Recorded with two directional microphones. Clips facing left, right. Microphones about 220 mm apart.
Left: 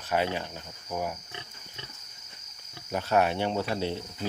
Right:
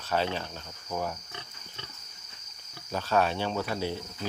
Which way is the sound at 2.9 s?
20° left (ahead or behind).